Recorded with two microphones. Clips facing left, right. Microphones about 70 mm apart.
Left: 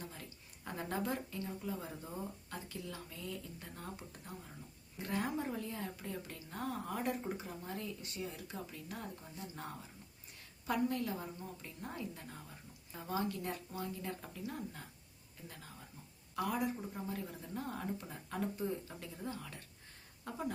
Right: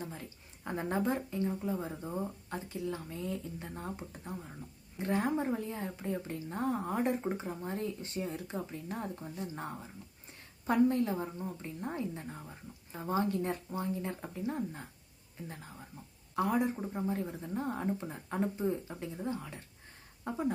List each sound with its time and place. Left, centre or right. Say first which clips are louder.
0.0 s a woman's voice: right 6 dB; right
10.7 s a woman's voice: right 8 dB; right
16.3 s a woman's voice: right 6 dB; right